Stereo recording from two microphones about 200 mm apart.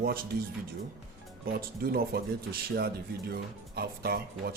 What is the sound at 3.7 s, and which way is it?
Speech, 50° right (ahead or behind).